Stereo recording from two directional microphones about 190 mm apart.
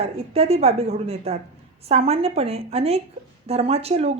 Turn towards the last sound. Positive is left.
turn(degrees=-35)  # may be behind; listen again after turning